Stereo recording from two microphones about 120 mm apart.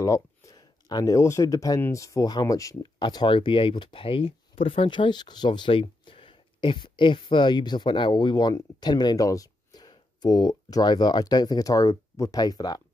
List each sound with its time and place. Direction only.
0.0 s speech: 30° left (ahead or behind)